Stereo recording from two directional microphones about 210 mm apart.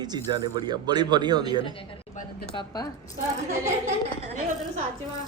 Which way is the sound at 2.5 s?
20° left (ahead or behind).